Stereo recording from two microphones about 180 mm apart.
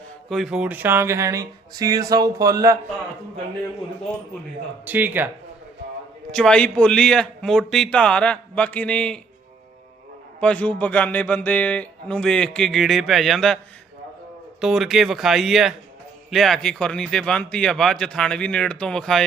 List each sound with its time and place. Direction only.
0.3 s speech: centre (ahead or behind); by 2.7 s 20° right (ahead or behind)
4.9 s speech: 10° right (ahead or behind)
6.3 s speech: 5° left (ahead or behind)
10.4 s a man's voice: 5° left (ahead or behind)
14.6 s speech: centre (ahead or behind)